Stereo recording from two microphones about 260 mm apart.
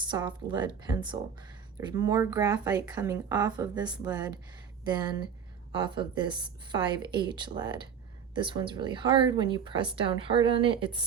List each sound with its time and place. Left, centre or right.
0.0 s speech: centre